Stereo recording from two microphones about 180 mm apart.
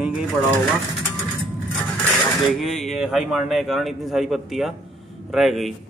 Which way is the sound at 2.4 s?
Centre (ahead or behind).